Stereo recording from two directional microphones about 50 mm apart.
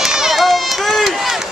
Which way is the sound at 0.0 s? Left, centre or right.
Centre.